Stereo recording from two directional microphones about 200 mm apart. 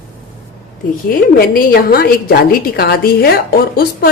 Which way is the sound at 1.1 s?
45° left (ahead or behind).